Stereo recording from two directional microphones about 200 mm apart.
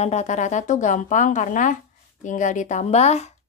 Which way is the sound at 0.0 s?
35° left (ahead or behind).